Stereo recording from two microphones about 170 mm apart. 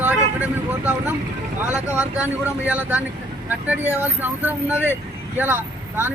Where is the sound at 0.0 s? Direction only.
10° right (ahead or behind).